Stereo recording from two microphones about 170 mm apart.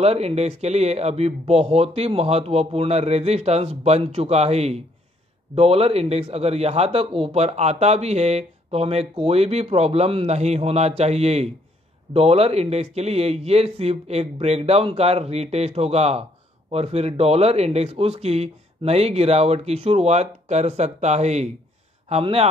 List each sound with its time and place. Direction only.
0.0 s a man's voice: 40° right (ahead or behind)